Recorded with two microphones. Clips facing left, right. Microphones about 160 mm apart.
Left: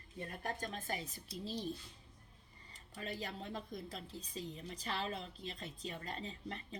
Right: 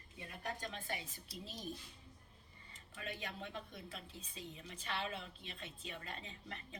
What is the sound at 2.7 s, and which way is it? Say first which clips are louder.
Speech: left 3 dB; 35° left (ahead or behind).